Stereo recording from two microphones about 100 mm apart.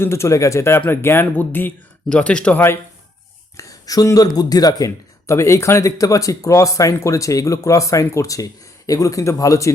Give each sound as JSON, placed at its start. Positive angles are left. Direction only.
{"t": 0.0, "sound": "speech", "side_deg": 25}
{"t": 3.6, "sound": "speech", "side_deg": 35}